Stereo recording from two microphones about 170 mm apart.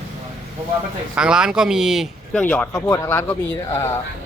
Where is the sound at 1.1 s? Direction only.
5° right (ahead or behind); by 3.9 s 15° left (ahead or behind).